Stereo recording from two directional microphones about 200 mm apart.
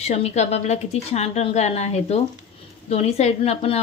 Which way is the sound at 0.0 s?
30° left (ahead or behind).